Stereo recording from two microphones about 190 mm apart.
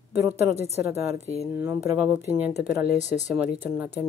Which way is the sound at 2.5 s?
60° left (ahead or behind).